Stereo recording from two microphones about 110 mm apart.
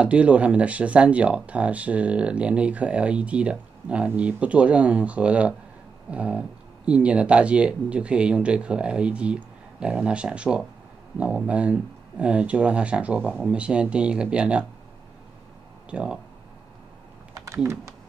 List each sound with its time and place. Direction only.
0.0 s speech: 10° right (ahead or behind)
15.9 s speech: 10° right (ahead or behind)